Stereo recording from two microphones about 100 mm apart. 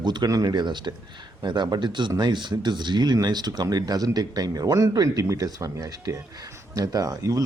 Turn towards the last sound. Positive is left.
turn(degrees=-35)  # may be behind; listen again after turning